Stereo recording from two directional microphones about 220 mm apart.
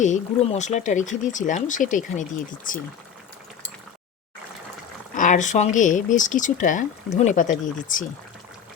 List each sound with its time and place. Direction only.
0.0 s speech: 35° left (ahead or behind)
5.1 s speech: 35° left (ahead or behind)